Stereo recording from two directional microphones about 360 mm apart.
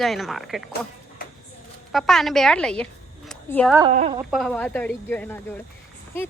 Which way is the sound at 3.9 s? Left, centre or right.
Centre.